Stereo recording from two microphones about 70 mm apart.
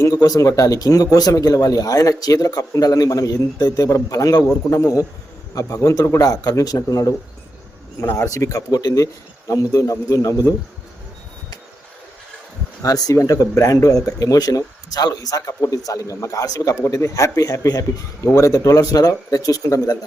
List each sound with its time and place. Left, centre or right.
0.0 s speech: left
8.1 s speech: left
12.8 s a man's voice: left